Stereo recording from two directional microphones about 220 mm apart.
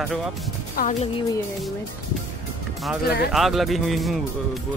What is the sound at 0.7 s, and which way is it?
Speech, 35° left (ahead or behind).